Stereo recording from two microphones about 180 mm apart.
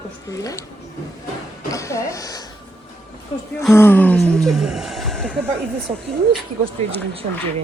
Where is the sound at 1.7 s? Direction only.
15° left (ahead or behind).